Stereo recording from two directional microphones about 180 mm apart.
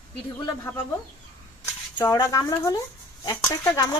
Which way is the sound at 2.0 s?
20° left (ahead or behind).